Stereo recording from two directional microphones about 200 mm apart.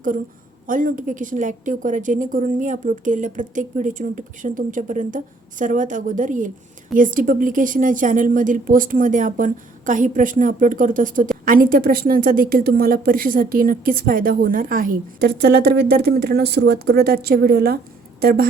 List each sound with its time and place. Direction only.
0.7 s a woman's voice: 40° right (ahead or behind)